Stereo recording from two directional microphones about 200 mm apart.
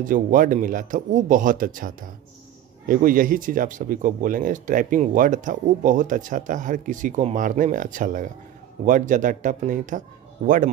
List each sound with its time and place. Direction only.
0.0 s speech: 40° right (ahead or behind)